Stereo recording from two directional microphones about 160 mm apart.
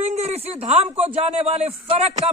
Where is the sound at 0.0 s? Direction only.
40° right (ahead or behind).